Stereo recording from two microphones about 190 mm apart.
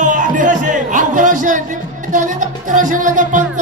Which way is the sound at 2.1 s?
40° right (ahead or behind).